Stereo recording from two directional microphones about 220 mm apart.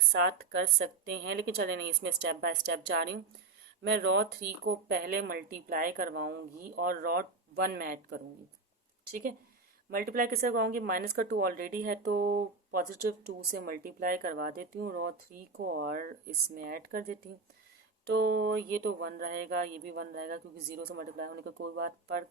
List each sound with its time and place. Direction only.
0.1 s speech: 50° right (ahead or behind)
9.9 s speech: 40° right (ahead or behind)